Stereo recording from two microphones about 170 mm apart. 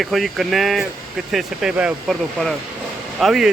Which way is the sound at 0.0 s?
Centre (ahead or behind).